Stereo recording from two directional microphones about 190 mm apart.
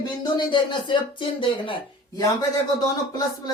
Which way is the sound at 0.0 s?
25° left (ahead or behind).